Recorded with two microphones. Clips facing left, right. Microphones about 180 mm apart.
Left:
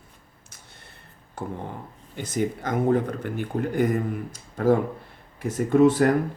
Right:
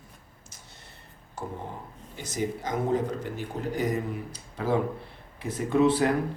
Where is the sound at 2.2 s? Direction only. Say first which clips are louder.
Left 4 dB; 55° left (ahead or behind).